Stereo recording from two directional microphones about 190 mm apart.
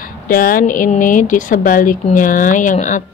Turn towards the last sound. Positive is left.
turn(degrees=40)  # may be behind; listen again after turning